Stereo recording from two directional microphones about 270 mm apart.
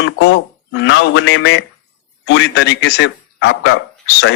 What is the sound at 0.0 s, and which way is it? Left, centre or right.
A man's voice, left.